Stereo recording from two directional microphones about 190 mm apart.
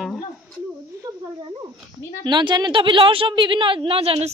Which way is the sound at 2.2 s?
25° right (ahead or behind).